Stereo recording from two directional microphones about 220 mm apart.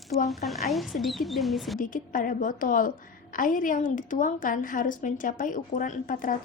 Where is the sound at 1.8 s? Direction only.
40° left (ahead or behind).